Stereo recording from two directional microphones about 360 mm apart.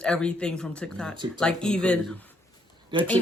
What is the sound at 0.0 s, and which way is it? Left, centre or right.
Speech, centre.